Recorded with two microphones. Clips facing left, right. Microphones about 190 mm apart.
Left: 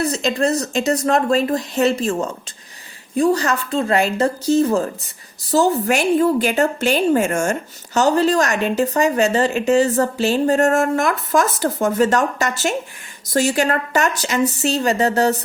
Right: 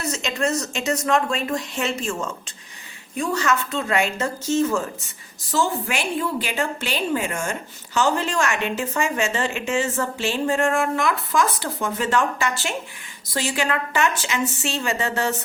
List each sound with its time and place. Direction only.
0.0 s a woman's voice: 35° left (ahead or behind)